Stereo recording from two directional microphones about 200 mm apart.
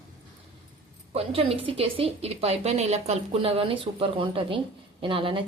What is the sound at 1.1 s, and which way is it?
A woman's voice, 30° right (ahead or behind).